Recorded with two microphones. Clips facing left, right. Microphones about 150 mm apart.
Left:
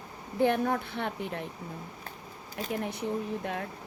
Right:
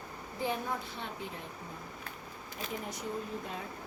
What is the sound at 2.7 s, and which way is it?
Speech, 65° left (ahead or behind).